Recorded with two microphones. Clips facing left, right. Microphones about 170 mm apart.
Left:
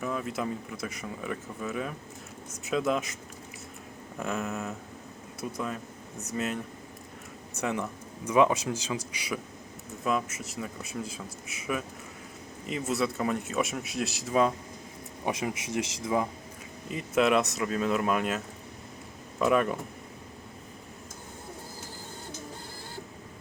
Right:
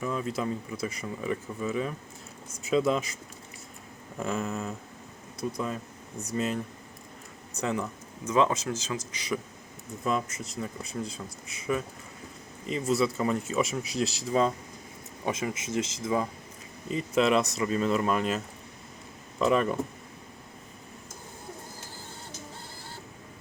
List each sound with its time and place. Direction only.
0.0 s speech: 5° left (ahead or behind)
4.2 s speech: centre (ahead or behind)
8.3 s speech: 15° left (ahead or behind)
15.2 s speech: 15° left (ahead or behind)
16.9 s speech: 5° left (ahead or behind)